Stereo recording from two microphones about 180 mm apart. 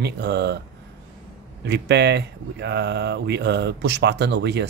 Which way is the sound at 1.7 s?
70° right (ahead or behind).